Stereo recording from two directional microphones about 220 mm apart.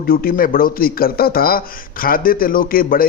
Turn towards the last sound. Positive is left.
turn(degrees=40)  # may be behind; listen again after turning